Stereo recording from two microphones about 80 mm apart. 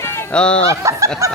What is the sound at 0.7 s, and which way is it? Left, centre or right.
Snicker, right.